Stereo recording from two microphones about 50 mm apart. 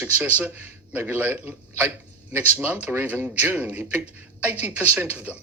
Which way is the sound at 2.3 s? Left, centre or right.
Right.